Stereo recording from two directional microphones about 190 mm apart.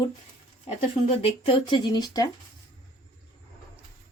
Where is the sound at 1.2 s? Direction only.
25° left (ahead or behind).